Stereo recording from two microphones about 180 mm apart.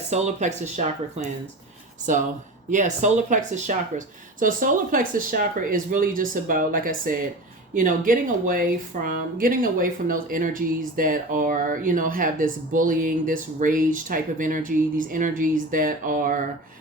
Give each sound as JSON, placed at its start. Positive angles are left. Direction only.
{"t": 0.1, "sound": "speech", "side_deg": -40}